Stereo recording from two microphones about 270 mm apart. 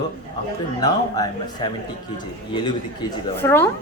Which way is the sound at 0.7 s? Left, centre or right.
Centre.